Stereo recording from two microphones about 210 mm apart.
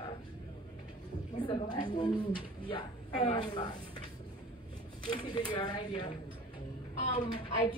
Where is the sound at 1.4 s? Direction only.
20° left (ahead or behind).